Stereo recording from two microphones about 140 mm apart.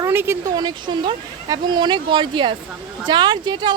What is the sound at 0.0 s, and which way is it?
Speech, 15° right (ahead or behind).